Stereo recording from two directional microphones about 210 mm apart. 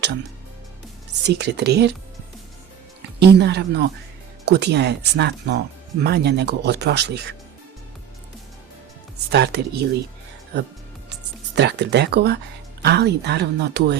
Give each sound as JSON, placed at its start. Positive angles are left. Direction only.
{"t": 1.2, "sound": "speech", "side_deg": -55}
{"t": 3.2, "sound": "speech", "side_deg": -55}
{"t": 9.3, "sound": "speech", "side_deg": -50}
{"t": 11.1, "sound": "speech", "side_deg": -55}